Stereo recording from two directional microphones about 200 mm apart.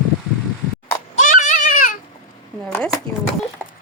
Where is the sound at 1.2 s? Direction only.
40° left (ahead or behind).